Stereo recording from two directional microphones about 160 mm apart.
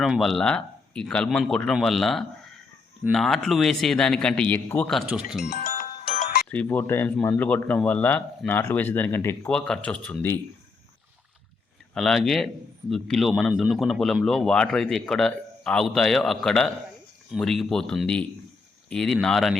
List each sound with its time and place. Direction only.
0.0 s speech: centre (ahead or behind)
6.1 s music: 55° left (ahead or behind)
6.5 s speech: 10° left (ahead or behind)
11.9 s speech: centre (ahead or behind)